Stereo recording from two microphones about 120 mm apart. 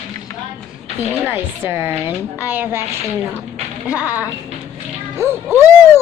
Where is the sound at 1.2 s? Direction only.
20° right (ahead or behind).